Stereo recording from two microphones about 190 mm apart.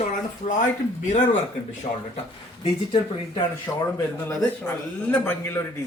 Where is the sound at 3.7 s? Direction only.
15° left (ahead or behind).